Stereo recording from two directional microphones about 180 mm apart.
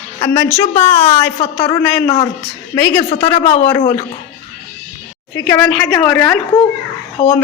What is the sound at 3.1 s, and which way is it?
Speech, 35° left (ahead or behind).